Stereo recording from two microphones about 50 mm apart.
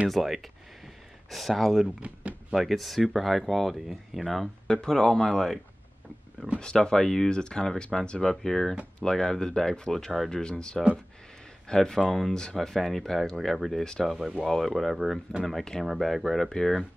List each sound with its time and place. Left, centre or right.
0.1 s a sound: centre
2.0 s speech: right
2.5 s speech: centre
4.6 s speech: centre
6.6 s speech: centre
10.3 s speech: centre
15.8 s speech: centre